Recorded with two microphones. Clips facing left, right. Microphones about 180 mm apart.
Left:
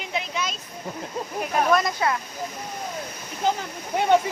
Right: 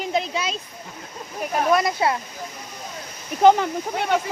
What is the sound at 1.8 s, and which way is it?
Speech, 30° right (ahead or behind).